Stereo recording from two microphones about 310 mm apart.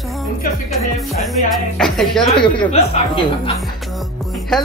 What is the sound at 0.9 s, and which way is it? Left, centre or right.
Speech, centre.